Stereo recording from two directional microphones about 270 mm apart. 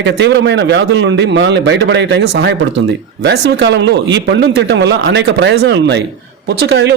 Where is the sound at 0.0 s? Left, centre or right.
Right.